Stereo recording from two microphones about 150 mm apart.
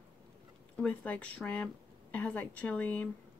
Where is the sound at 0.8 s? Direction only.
5° left (ahead or behind).